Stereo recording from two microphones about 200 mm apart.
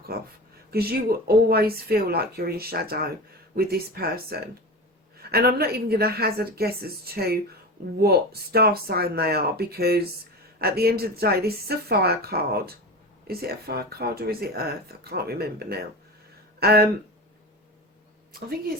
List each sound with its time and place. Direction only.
0.1 s speech: 50° right (ahead or behind)